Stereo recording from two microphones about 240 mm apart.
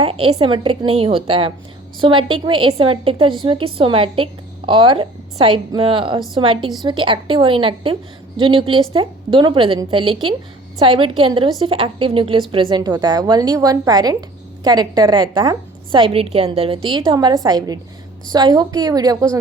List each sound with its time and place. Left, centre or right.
0.0 s a woman's voice: right